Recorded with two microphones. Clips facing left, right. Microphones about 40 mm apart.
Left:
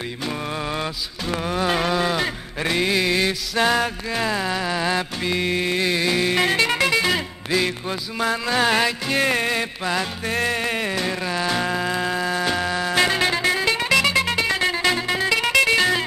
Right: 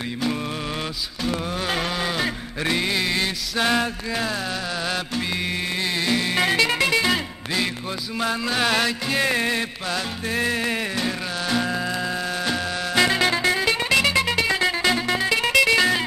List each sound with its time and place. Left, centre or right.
1.2 s mantra: centre
4.3 s music: left
5.2 s music: centre
9.8 s music: left
10.6 s music: centre